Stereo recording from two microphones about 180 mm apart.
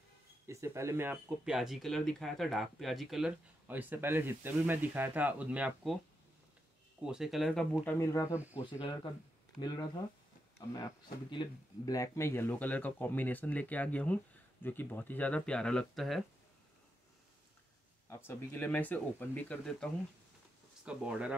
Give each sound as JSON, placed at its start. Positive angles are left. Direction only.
{"t": 0.5, "sound": "speech", "side_deg": -15}
{"t": 7.0, "sound": "speech", "side_deg": -5}
{"t": 8.0, "sound": "speech", "side_deg": 15}
{"t": 8.7, "sound": "speech", "side_deg": 25}
{"t": 18.1, "sound": "speech", "side_deg": 10}
{"t": 20.8, "sound": "speech", "side_deg": -5}